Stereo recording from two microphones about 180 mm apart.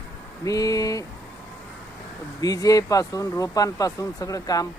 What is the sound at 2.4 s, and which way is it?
Speech, 20° left (ahead or behind).